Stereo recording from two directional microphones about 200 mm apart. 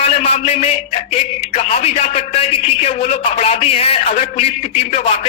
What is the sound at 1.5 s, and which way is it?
A man's voice, 30° left (ahead or behind).